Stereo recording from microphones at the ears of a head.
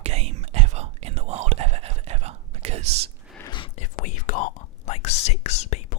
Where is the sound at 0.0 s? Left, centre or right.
Right.